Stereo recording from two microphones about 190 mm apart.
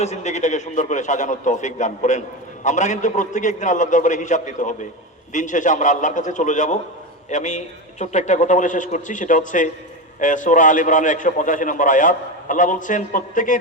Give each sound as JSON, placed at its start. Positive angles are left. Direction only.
{"t": 0.0, "sound": "a man's voice", "side_deg": 35}